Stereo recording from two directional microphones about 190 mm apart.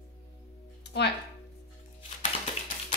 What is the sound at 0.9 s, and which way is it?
Speech, 60° left (ahead or behind).